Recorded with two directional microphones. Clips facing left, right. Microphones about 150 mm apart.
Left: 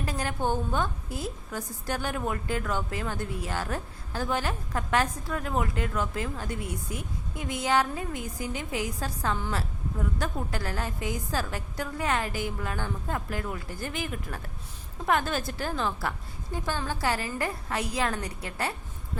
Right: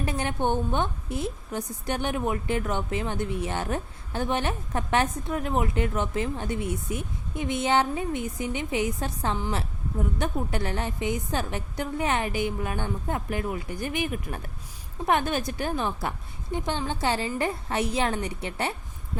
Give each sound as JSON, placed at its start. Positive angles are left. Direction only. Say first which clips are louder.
{"t": 0.0, "sound": "a woman's voice", "louder": "right 3 dB", "side_deg": -25}